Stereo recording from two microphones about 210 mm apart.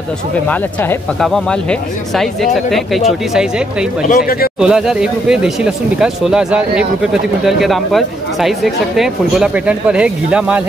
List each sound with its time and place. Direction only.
0.5 s speech: 5° left (ahead or behind)
4.1 s speech: 45° left (ahead or behind)
4.6 s speech: centre (ahead or behind)